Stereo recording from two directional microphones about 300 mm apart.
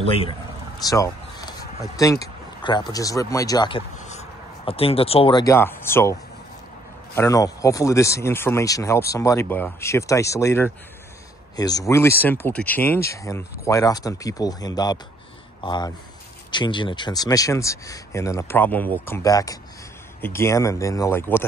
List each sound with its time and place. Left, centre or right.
0.0 s a man's voice: centre
7.2 s speech: centre